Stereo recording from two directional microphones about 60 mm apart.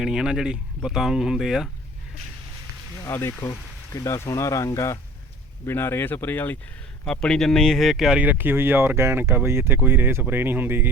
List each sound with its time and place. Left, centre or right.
0.0 s speech: centre
3.2 s speech: left
5.6 s speech: left
7.0 s speech: centre
8.2 s speech: right